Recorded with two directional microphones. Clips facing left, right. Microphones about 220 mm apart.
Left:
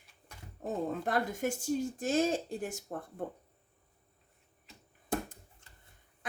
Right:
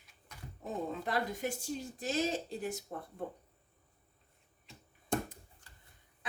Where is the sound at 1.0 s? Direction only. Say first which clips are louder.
Left 3 dB; 50° left (ahead or behind).